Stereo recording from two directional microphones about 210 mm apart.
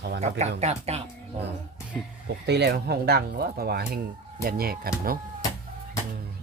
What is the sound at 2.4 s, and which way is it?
Speech, 55° right (ahead or behind).